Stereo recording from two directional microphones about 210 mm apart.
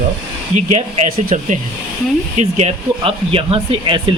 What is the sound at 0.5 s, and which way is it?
Speech, 35° right (ahead or behind).